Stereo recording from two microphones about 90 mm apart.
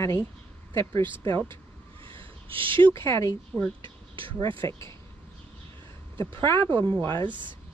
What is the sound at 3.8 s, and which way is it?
Speech, 70° right (ahead or behind).